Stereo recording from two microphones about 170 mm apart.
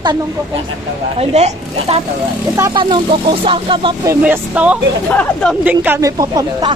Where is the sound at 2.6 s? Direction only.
25° right (ahead or behind).